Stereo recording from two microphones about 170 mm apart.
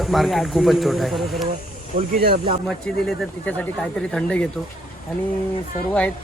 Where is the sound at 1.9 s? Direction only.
55° right (ahead or behind).